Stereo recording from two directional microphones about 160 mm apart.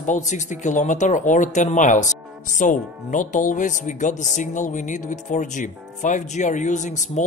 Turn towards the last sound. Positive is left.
turn(degrees=50)  # may be behind; listen again after turning